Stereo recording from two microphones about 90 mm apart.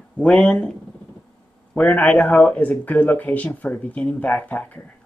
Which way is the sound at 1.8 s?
15° left (ahead or behind).